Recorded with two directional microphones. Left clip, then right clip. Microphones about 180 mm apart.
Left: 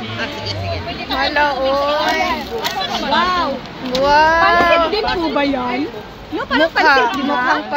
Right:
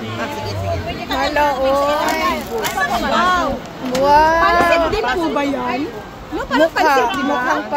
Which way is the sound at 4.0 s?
10° right (ahead or behind).